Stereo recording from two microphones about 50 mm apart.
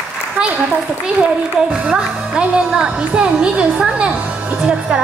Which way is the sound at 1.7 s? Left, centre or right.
Right.